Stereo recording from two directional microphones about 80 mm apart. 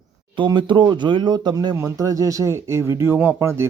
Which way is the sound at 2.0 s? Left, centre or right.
Right.